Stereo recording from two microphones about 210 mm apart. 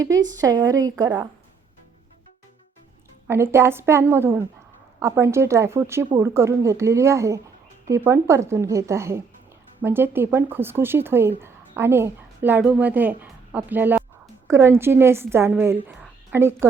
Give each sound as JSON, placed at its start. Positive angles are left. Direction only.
{"t": 0.0, "sound": "speech", "side_deg": -15}
{"t": 3.2, "sound": "speech", "side_deg": -10}